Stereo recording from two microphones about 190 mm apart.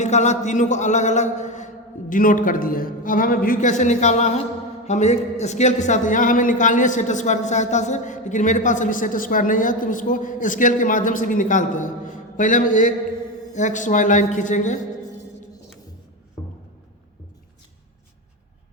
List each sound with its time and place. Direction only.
0.0 s a man's voice: 40° left (ahead or behind)